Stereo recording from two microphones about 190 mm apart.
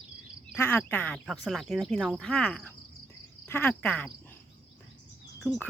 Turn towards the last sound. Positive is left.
turn(degrees=0)  # may be behind; listen again after turning